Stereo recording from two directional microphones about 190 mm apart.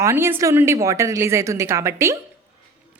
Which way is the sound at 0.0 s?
15° right (ahead or behind).